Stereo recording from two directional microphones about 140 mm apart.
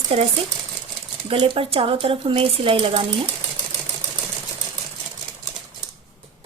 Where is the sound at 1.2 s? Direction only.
40° right (ahead or behind).